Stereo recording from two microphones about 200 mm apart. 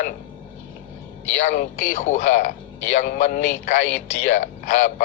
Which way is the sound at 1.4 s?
40° left (ahead or behind).